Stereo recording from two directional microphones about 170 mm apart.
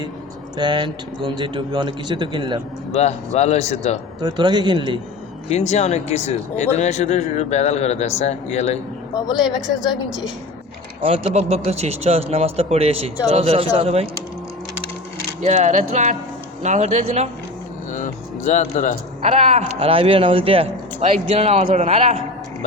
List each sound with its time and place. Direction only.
0.5 s a man's voice: 25° right (ahead or behind)
2.9 s speech: 40° left (ahead or behind)
4.2 s a man's voice: 25° right (ahead or behind)
5.5 s speech: 40° left (ahead or behind)
9.8 s a woman's voice: centre (ahead or behind)
11.0 s speech: 35° right (ahead or behind)
15.4 s speech: 40° right (ahead or behind)
17.9 s music: 45° left (ahead or behind)
19.2 s speech: 40° right (ahead or behind)